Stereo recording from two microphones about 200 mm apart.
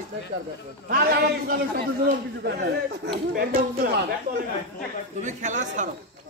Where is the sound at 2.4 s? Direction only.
55° right (ahead or behind).